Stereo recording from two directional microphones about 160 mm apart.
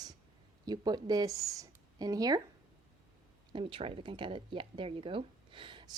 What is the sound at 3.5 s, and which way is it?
Speech, 35° right (ahead or behind).